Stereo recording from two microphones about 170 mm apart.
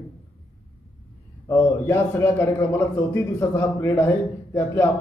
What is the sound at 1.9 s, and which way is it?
A man's voice, 15° left (ahead or behind).